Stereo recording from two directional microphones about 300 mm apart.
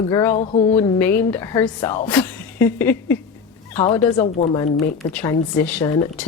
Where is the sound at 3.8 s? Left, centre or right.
Left.